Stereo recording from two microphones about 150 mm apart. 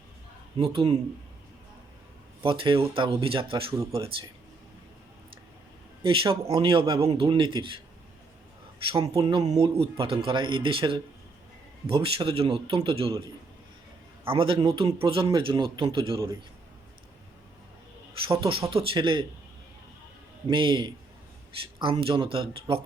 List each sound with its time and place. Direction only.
0.6 s a man's voice: 35° right (ahead or behind)
2.4 s a man's voice: 35° right (ahead or behind)
6.2 s a man's voice: 25° right (ahead or behind)
8.9 s a man's voice: 35° right (ahead or behind)
14.3 s a man's voice: 35° right (ahead or behind)
18.3 s a man's voice: 35° right (ahead or behind)
20.5 s a man's voice: 35° right (ahead or behind)